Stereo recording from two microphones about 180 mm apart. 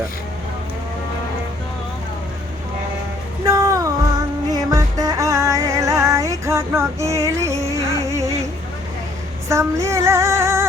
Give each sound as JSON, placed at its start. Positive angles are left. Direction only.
{"t": 3.4, "sound": "music", "side_deg": -15}
{"t": 9.5, "sound": "female singing", "side_deg": -15}